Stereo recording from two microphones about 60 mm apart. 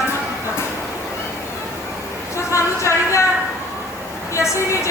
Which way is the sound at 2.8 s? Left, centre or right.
Left.